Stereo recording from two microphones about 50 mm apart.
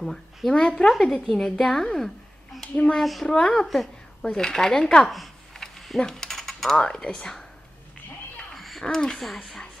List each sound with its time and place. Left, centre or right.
0.0 s speech: centre
0.5 s a woman's voice: centre
3.3 s speech: centre
3.6 s speech: centre
4.2 s speech: centre
5.0 s a sound: centre
5.9 s mechanisms: centre
8.5 s a sound: centre
8.9 s speech: centre